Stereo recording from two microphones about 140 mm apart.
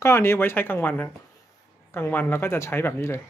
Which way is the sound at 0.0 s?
20° left (ahead or behind).